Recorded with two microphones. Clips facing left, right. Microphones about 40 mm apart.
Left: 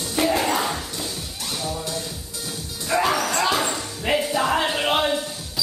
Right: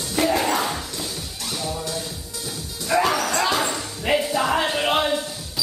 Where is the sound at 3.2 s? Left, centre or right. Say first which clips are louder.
Even; centre.